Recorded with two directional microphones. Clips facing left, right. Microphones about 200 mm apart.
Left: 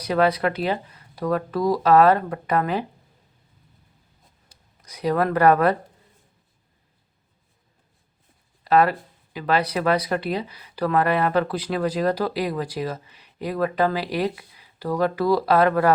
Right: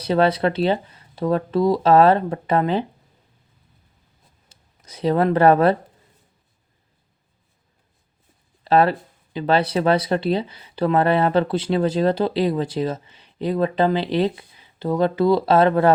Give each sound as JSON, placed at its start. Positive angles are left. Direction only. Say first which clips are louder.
{"t": 0.0, "sound": "speech", "louder": "right 2 dB", "side_deg": -30}
{"t": 4.4, "sound": "speech", "louder": "right 3 dB", "side_deg": -25}
{"t": 8.6, "sound": "speech", "louder": "right 2 dB", "side_deg": -30}